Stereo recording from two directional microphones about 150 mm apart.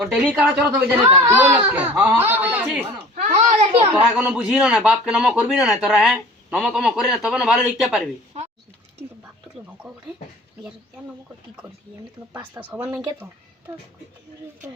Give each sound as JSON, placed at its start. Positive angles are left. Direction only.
{"t": 0.0, "sound": "speech", "side_deg": -5}
{"t": 3.2, "sound": "a sound", "side_deg": -50}
{"t": 4.3, "sound": "speech", "side_deg": -5}
{"t": 12.7, "sound": "speech", "side_deg": -10}